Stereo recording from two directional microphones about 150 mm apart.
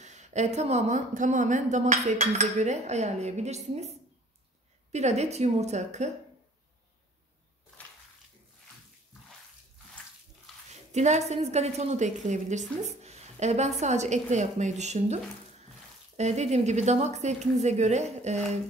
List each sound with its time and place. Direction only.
0.0 s a woman's voice: 50° right (ahead or behind)
4.9 s a woman's voice: 50° right (ahead or behind)
10.7 s a woman's voice: 50° right (ahead or behind)
16.2 s a woman's voice: 50° right (ahead or behind)